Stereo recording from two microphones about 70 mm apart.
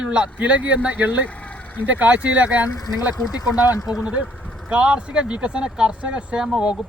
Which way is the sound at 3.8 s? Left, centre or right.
Centre.